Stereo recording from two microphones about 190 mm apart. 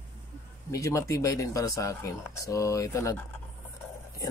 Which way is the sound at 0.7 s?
15° left (ahead or behind).